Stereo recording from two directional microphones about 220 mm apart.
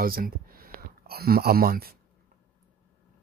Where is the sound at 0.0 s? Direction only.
40° right (ahead or behind).